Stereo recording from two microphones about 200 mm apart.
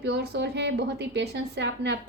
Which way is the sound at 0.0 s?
55° right (ahead or behind).